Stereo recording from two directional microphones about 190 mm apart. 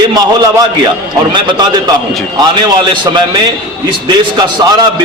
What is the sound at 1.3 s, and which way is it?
A man's voice, 25° right (ahead or behind).